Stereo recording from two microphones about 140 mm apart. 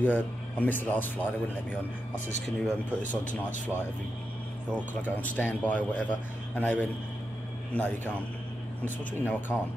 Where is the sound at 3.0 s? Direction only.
65° left (ahead or behind).